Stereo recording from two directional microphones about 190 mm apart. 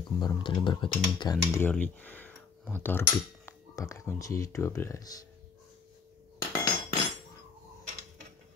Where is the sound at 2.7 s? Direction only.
10° left (ahead or behind).